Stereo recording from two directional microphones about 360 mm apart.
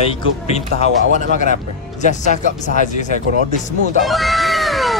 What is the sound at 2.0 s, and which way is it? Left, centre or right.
Speech, centre.